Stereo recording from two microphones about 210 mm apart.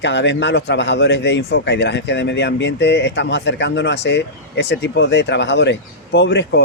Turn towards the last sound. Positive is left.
turn(degrees=55)  # may be behind; listen again after turning